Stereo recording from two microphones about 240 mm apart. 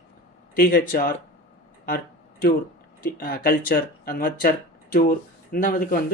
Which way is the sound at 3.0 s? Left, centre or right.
Left.